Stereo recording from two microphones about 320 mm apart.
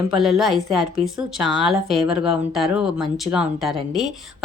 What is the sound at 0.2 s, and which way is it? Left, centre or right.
Speech, centre.